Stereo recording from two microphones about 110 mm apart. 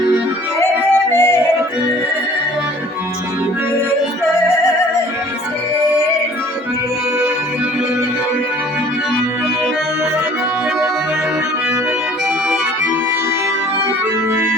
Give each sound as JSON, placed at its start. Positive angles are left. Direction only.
{"t": 1.1, "sound": "yodeling", "side_deg": 20}